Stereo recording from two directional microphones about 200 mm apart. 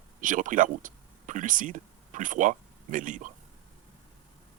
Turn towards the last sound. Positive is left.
turn(degrees=-40)  # may be behind; listen again after turning